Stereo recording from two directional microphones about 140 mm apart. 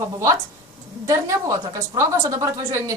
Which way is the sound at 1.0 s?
25° right (ahead or behind).